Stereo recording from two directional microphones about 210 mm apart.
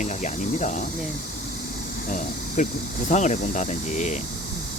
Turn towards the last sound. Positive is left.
turn(degrees=35)  # may be behind; listen again after turning